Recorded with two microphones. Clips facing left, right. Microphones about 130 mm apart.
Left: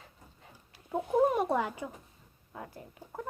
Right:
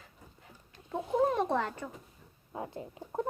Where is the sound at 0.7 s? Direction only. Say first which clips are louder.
Left 2 dB; 10° left (ahead or behind).